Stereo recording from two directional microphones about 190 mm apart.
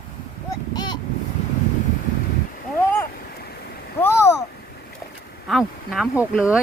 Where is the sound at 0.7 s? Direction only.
20° left (ahead or behind).